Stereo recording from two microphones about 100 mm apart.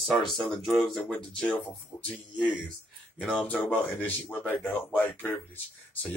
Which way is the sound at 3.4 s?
15° left (ahead or behind).